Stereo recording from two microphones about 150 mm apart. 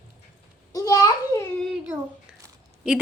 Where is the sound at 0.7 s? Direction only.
25° left (ahead or behind).